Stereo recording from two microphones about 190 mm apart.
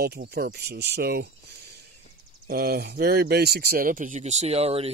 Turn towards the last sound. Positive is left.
turn(degrees=-30)  # may be behind; listen again after turning